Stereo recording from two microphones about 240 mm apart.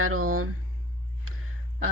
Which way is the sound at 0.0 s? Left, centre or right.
Right.